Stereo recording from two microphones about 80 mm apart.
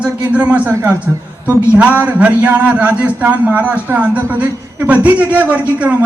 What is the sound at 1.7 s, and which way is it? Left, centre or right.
A man's voice, centre.